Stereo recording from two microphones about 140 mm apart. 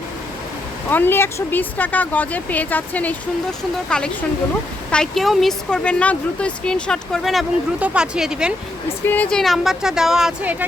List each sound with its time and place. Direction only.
0.9 s speech: 15° left (ahead or behind); by 8.5 s 5° right (ahead or behind)
9.0 s speech: 10° left (ahead or behind); by 10.7 s 10° right (ahead or behind)